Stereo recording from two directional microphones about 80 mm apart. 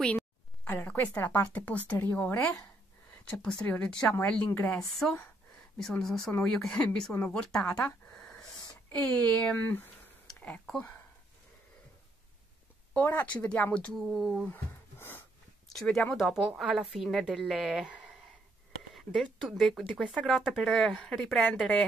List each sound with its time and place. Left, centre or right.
0.7 s speech: left
5.9 s a woman's voice: centre
8.1 s a sound: centre
8.9 s speech: centre
12.9 s speech: left
14.1 s a woman's voice: centre
14.5 s a sound: left
15.7 s a woman's voice: centre
18.9 s a woman's voice: centre